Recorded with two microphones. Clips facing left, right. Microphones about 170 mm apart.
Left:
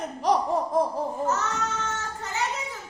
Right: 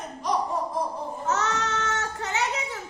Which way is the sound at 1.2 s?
80° right.